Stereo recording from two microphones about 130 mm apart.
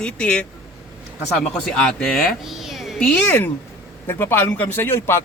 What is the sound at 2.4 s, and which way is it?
A child's voice, centre (ahead or behind).